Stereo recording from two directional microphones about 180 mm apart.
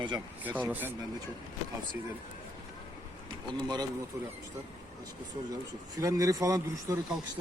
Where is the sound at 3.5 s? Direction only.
20° right (ahead or behind).